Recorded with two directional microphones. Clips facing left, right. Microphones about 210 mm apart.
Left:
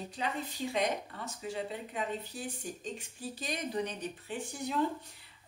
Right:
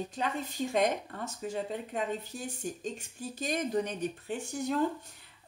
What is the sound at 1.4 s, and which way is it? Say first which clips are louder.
Speech: right 3 dB; 45° right (ahead or behind).